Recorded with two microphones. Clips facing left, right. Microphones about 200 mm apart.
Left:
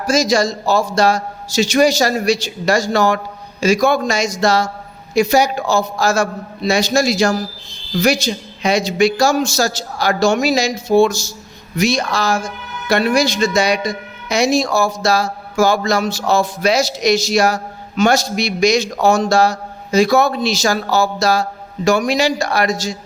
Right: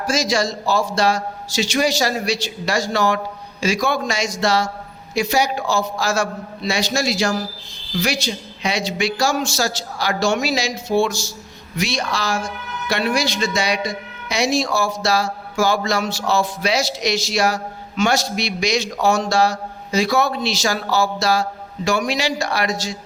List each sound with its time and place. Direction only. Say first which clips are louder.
0.1 s a man's voice: left 5 dB; 45° left (ahead or behind)